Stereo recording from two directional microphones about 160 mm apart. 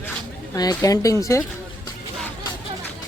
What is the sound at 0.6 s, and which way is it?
Speech, 25° left (ahead or behind).